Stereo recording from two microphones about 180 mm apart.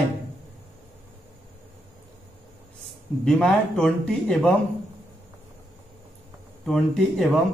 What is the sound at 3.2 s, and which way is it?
Speech, 5° left (ahead or behind).